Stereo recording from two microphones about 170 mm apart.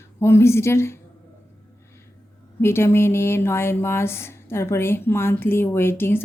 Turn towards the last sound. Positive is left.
turn(degrees=15)  # may be behind; listen again after turning